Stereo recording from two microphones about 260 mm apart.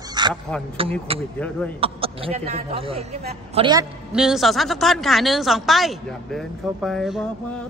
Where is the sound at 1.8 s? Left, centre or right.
Right.